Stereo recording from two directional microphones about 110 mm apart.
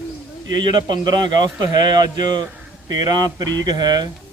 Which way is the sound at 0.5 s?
45° right (ahead or behind).